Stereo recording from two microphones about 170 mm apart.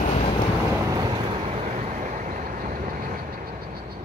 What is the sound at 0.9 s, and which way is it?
Vehicle, 25° right (ahead or behind).